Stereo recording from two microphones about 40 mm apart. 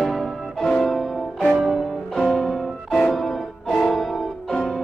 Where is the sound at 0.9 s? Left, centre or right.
Centre.